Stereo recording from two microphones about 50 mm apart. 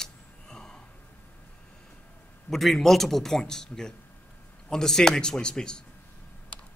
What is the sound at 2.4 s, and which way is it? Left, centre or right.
A man's voice, centre.